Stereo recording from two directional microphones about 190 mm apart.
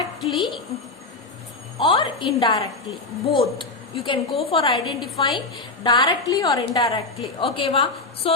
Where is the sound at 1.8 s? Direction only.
25° left (ahead or behind).